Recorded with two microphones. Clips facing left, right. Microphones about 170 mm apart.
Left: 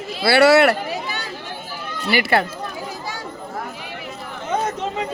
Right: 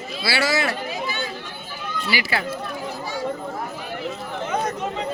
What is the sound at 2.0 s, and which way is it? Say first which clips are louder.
Speech: left 7 dB; 55° left (ahead or behind).